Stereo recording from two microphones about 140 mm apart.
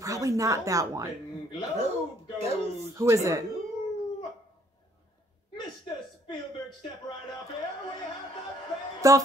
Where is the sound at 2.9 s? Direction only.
20° right (ahead or behind).